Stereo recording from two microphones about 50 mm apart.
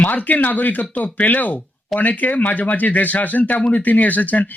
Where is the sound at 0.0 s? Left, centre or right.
Left.